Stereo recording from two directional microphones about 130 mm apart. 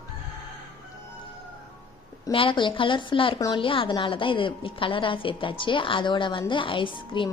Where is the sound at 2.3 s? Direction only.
40° left (ahead or behind).